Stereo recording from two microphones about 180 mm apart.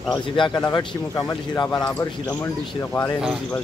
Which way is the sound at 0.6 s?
20° left (ahead or behind).